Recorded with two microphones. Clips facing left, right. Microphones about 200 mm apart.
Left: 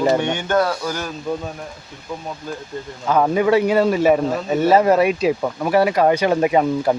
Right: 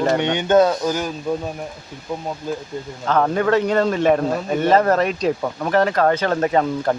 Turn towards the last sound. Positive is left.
turn(degrees=10)  # may be behind; listen again after turning